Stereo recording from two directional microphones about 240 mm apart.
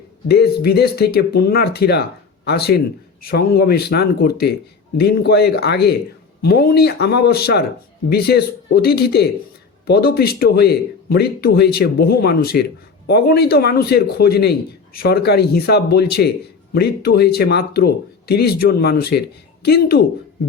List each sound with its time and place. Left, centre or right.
0.3 s speech: left